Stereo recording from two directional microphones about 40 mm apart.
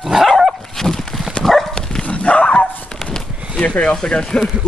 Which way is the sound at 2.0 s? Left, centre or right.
Left.